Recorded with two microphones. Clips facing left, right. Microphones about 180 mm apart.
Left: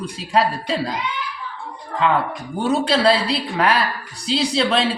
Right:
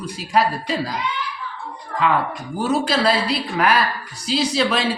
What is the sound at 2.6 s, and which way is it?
A man's voice, 30° left (ahead or behind).